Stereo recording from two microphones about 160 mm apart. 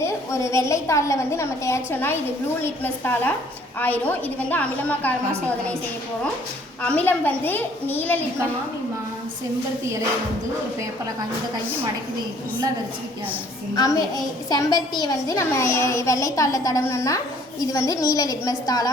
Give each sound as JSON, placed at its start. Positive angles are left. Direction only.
{"t": 0.0, "sound": "a woman's voice", "side_deg": 20}
{"t": 6.8, "sound": "a woman's voice", "side_deg": 10}
{"t": 13.7, "sound": "a child's voice", "side_deg": 20}